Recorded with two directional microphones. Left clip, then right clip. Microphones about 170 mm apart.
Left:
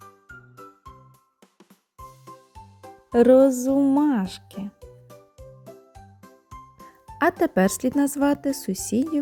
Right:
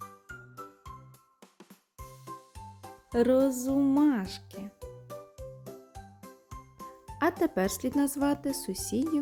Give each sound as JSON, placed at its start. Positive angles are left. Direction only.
{"t": 1.5, "sound": "music", "side_deg": 0}
{"t": 3.1, "sound": "speech", "side_deg": 25}
{"t": 4.8, "sound": "music", "side_deg": 0}
{"t": 6.5, "sound": "music", "side_deg": 0}
{"t": 7.2, "sound": "speech", "side_deg": 30}